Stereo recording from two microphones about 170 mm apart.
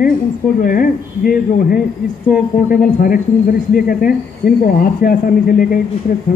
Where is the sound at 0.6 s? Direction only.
60° left (ahead or behind).